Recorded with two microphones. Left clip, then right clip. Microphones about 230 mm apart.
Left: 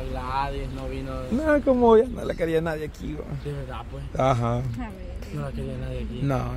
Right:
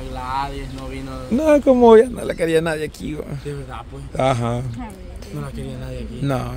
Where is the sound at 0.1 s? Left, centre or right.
Right.